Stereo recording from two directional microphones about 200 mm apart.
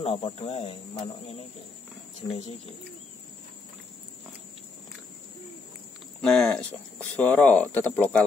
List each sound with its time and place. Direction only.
0.0 s speech: 30° left (ahead or behind)
6.2 s speech: centre (ahead or behind)